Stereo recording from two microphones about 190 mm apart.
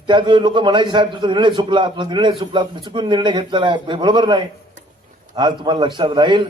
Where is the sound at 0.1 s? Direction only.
25° right (ahead or behind).